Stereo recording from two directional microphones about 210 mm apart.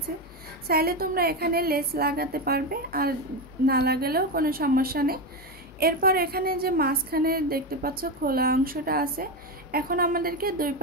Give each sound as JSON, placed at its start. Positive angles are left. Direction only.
{"t": 0.7, "sound": "a woman's voice", "side_deg": -45}